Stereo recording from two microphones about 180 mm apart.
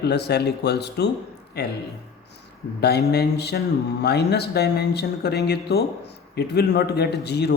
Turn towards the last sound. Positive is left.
turn(degrees=65)  # may be behind; listen again after turning